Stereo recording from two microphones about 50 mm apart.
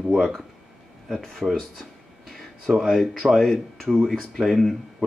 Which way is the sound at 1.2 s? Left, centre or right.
Centre.